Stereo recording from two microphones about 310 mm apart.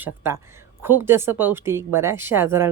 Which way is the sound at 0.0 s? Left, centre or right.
Centre.